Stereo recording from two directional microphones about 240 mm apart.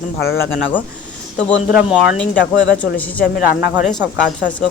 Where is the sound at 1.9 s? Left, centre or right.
Centre.